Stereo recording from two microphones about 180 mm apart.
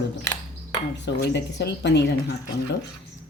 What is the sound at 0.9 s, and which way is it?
Cutlery, 75° left (ahead or behind).